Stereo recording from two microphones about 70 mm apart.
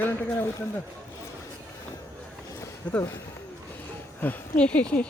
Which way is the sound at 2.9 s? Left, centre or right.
Centre.